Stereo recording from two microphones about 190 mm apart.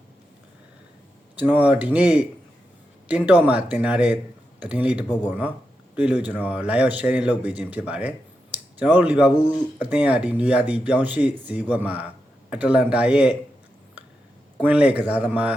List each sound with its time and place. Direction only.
1.4 s speech: 5° right (ahead or behind)
14.6 s speech: 5° right (ahead or behind)